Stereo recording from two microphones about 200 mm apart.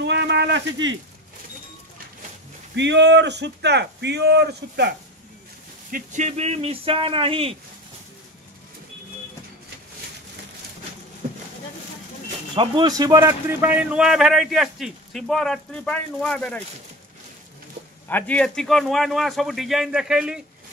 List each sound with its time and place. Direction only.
0.0 s a sound: 60° right (ahead or behind)
2.7 s speech: 60° right (ahead or behind)
5.9 s speech: 40° right (ahead or behind)
12.5 s a man's voice: 20° right (ahead or behind); by 16.6 s 5° left (ahead or behind)
18.0 s a man's voice: 10° left (ahead or behind)